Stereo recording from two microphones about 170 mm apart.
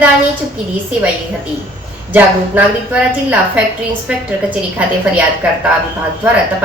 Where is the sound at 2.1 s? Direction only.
10° right (ahead or behind).